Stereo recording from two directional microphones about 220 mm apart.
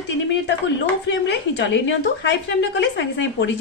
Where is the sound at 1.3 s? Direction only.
55° left (ahead or behind).